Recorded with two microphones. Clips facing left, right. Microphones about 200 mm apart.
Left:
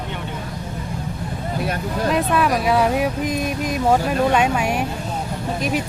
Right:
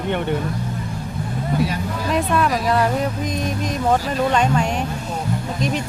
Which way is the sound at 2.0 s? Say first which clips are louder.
Left 1 dB; 5° left (ahead or behind).